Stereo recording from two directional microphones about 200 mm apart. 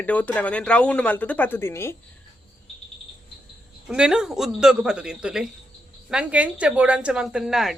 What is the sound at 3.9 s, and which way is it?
A woman's voice, 5° right (ahead or behind).